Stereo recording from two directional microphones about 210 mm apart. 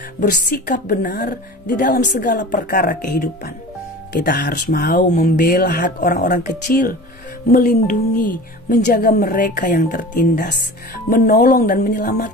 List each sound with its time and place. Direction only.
0.2 s a woman's voice: 40° left (ahead or behind)